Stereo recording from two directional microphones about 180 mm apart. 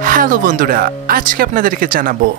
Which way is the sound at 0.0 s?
50° right (ahead or behind).